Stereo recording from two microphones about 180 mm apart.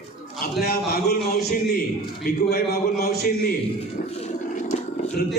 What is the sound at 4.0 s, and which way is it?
Speech, 45° left (ahead or behind).